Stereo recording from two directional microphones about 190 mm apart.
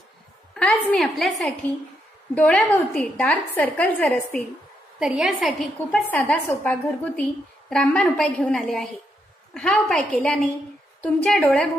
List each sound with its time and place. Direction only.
0.6 s a woman's voice: 5° left (ahead or behind)